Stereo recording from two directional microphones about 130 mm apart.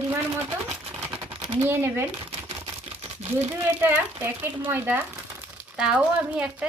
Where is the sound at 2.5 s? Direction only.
45° right (ahead or behind).